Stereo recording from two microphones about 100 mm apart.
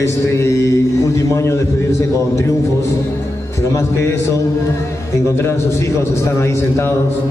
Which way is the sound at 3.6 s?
30° left (ahead or behind).